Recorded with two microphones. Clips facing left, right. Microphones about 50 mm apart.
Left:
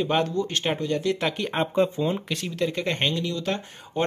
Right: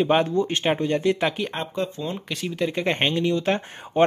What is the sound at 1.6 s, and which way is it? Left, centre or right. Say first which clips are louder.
Speech: left 5 dB; left.